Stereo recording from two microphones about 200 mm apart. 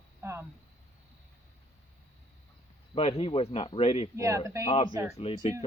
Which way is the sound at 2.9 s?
30° left (ahead or behind).